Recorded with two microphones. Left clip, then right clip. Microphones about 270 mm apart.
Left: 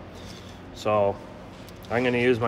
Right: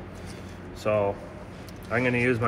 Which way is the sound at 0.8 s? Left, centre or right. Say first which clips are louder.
Left 2 dB; left.